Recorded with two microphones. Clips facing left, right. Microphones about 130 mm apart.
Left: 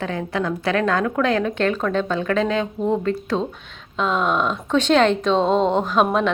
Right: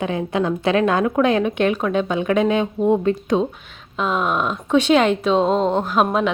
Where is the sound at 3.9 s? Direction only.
5° right (ahead or behind).